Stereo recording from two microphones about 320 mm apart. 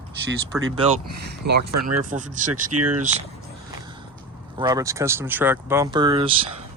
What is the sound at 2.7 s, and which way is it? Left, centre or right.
Speech, right.